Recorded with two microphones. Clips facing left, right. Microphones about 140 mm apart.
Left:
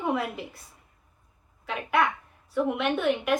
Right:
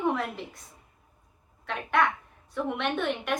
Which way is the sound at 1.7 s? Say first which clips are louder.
Left 1 dB; 5° left (ahead or behind).